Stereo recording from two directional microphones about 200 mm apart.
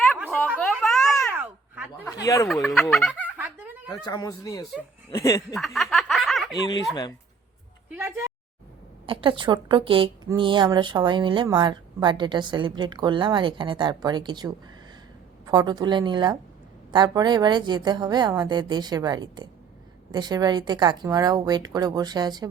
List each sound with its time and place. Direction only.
0.3 s a sound: 5° left (ahead or behind)
1.3 s a sound: 10° right (ahead or behind)
2.2 s speech: 15° left (ahead or behind)
2.5 s speech: centre (ahead or behind)
3.3 s snicker: 10° right (ahead or behind)
4.0 s speech: 20° left (ahead or behind)
5.5 s snicker: centre (ahead or behind)
7.9 s a sound: 5° right (ahead or behind)
9.0 s speech: 25° right (ahead or behind)